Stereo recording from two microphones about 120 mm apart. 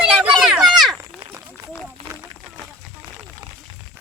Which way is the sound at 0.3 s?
5° right (ahead or behind).